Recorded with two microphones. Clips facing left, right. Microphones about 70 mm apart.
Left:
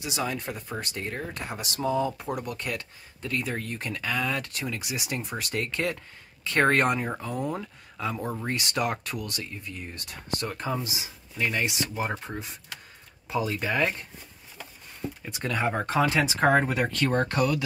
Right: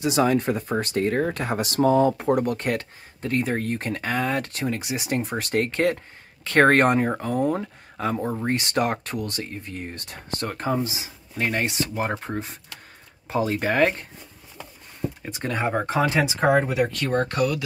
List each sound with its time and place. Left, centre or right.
0.0 s speech: right
8.2 s speech: centre
8.5 s speech: right
11.3 s speech: right
11.6 s speech: right
15.2 s speech: right
16.3 s speech: centre